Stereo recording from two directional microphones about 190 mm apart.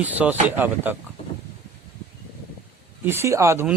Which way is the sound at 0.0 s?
10° right (ahead or behind).